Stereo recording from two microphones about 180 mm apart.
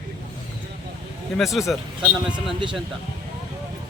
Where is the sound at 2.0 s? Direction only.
25° right (ahead or behind).